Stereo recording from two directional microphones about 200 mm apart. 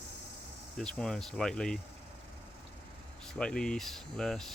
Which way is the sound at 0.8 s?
5° left (ahead or behind).